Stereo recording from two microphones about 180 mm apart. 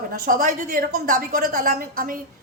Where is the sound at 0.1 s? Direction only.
50° right (ahead or behind).